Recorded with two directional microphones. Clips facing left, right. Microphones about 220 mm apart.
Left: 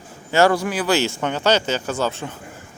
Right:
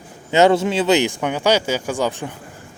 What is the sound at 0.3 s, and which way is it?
Speech, 20° right (ahead or behind).